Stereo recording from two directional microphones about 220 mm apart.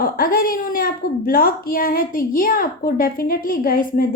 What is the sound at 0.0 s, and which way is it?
A woman's voice, 40° left (ahead or behind).